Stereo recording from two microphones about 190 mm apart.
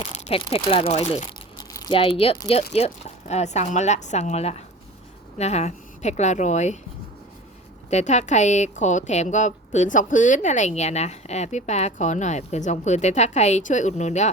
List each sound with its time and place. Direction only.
0.1 s speech: 30° left (ahead or behind)
7.9 s speech: 35° left (ahead or behind)